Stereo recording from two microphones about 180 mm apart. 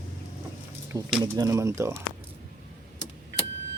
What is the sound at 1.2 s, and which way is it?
Speech, 20° right (ahead or behind).